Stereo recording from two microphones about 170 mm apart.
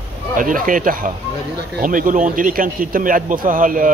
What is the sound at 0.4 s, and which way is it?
Speech, 55° right (ahead or behind).